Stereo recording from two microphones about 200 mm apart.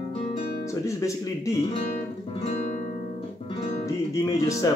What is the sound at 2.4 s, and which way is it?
Guitar, 35° left (ahead or behind).